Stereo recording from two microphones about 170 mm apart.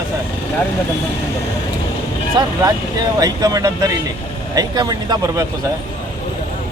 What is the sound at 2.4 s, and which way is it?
Speech, 25° right (ahead or behind).